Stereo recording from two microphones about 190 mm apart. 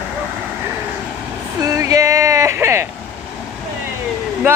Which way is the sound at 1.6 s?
15° right (ahead or behind).